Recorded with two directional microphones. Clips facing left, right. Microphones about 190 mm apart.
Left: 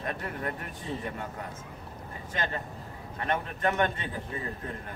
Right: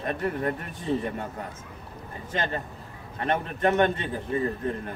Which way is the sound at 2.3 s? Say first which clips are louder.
Right 4 dB; 25° right (ahead or behind).